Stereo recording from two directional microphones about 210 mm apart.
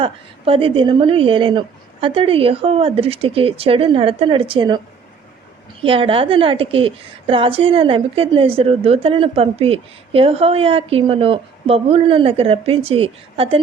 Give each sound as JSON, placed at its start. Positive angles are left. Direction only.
{"t": 0.0, "sound": "a woman's voice", "side_deg": -25}
{"t": 5.8, "sound": "a woman's voice", "side_deg": -25}